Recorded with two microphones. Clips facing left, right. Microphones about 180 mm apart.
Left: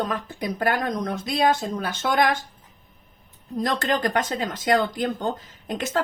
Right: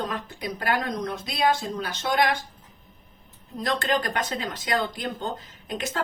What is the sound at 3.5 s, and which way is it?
Speech, 45° left (ahead or behind).